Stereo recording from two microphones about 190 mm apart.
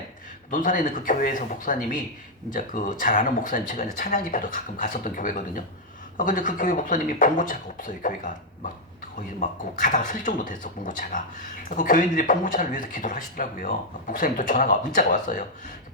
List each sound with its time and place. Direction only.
0.5 s speech: 45° left (ahead or behind)